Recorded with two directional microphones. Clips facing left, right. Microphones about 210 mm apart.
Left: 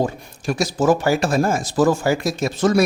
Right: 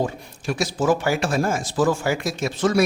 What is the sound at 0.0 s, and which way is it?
Speech, 40° left (ahead or behind).